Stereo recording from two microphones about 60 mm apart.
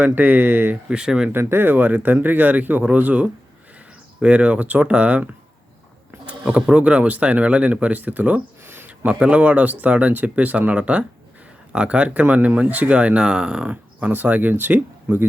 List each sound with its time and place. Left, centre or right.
0.0 s speech: right
0.9 s speech: centre
1.3 s speech: right
6.4 s speech: centre
8.6 s a sound: right
9.1 s speech: centre